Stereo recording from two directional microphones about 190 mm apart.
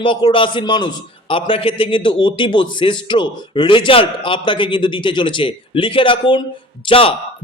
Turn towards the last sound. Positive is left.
turn(degrees=30)  # may be behind; listen again after turning